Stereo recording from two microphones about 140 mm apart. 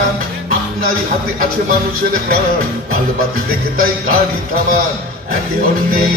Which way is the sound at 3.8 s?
90° right.